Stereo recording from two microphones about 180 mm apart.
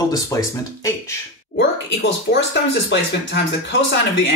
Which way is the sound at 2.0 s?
85° left.